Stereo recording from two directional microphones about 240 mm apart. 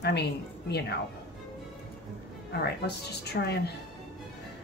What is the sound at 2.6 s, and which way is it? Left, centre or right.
Speech, left.